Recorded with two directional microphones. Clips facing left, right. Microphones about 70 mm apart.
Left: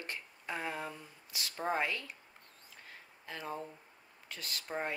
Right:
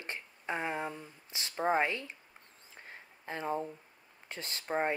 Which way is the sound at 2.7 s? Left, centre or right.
Right.